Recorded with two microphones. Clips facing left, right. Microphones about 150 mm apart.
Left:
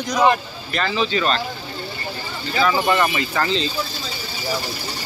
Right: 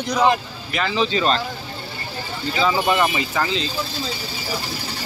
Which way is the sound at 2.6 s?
15° right (ahead or behind).